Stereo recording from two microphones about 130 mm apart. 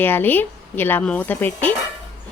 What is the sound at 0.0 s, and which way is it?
A woman's voice, 15° left (ahead or behind).